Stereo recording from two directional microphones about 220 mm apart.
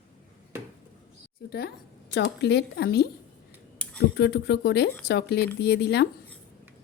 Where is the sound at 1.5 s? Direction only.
45° left (ahead or behind).